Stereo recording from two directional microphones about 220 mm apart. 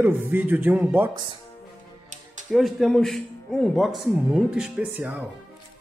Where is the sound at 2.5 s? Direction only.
Centre (ahead or behind).